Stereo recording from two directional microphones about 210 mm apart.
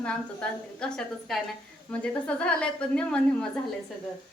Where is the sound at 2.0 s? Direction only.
5° left (ahead or behind).